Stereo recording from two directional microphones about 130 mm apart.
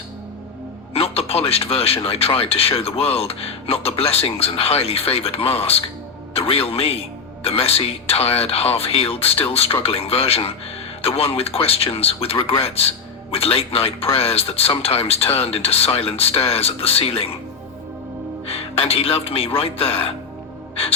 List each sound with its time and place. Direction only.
0.9 s speech: 50° left (ahead or behind)
18.4 s music: 50° left (ahead or behind)
18.8 s speech: 50° left (ahead or behind)